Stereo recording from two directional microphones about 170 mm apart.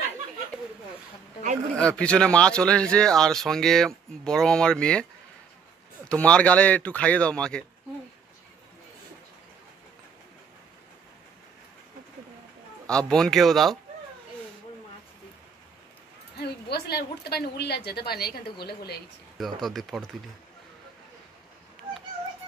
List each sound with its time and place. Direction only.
1.7 s speech: 5° left (ahead or behind)
6.0 s speech: 5° left (ahead or behind)
12.8 s speech: 5° left (ahead or behind)
16.3 s a woman's voice: 70° left (ahead or behind)
19.3 s speech: centre (ahead or behind)